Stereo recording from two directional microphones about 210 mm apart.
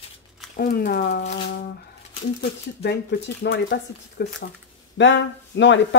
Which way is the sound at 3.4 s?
45° left (ahead or behind).